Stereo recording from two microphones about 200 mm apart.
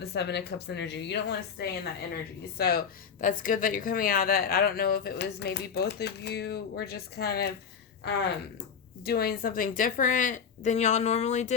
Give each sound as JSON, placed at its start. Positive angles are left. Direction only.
{"t": 0.0, "sound": "a woman's voice", "side_deg": 55}
{"t": 9.0, "sound": "a woman's voice", "side_deg": 50}